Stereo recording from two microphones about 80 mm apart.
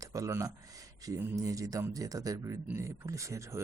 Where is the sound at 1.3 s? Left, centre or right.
Right.